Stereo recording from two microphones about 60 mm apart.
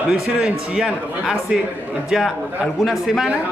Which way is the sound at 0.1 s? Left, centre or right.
Centre.